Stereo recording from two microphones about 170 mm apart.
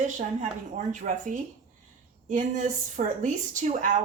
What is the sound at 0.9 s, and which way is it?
A woman's voice, 45° right (ahead or behind).